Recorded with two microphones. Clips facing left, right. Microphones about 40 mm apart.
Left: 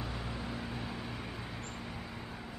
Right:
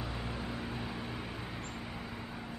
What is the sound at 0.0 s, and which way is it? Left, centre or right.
Vehicle, centre.